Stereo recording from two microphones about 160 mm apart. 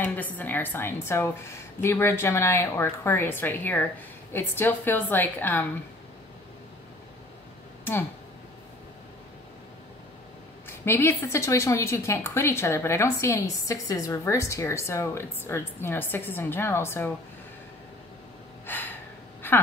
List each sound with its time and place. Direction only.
0.0 s a woman's voice: 10° left (ahead or behind)
10.7 s a woman's voice: 15° left (ahead or behind)
18.7 s gasp: 10° left (ahead or behind)